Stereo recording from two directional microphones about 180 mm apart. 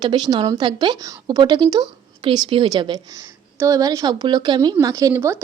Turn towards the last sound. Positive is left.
turn(degrees=-15)  # may be behind; listen again after turning